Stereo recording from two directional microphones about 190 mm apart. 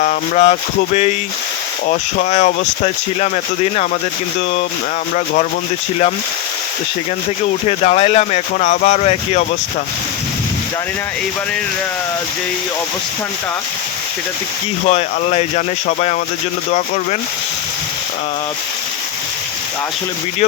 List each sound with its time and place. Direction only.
0.0 s speech: 40° left (ahead or behind)
1.9 s speech: 40° left (ahead or behind)
5.1 s speech: 40° left (ahead or behind)
7.7 s speech: 35° left (ahead or behind)
14.8 s speech: 35° left (ahead or behind)